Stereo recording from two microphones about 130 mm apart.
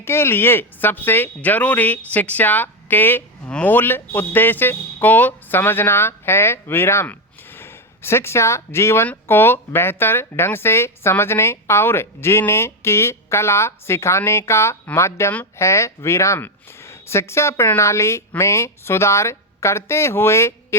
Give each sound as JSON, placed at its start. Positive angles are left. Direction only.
{"t": 0.0, "sound": "speech", "side_deg": 20}